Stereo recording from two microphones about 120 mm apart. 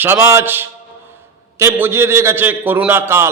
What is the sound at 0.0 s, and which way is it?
A man's voice, 20° right (ahead or behind).